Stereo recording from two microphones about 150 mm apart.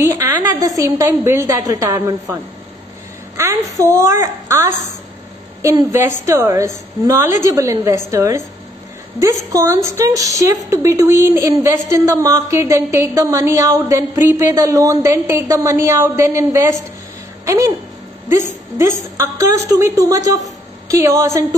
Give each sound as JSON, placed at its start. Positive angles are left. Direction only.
{"t": 0.0, "sound": "a woman's voice", "side_deg": -20}
{"t": 3.3, "sound": "a woman's voice", "side_deg": -20}
{"t": 19.1, "sound": "a woman's voice", "side_deg": -20}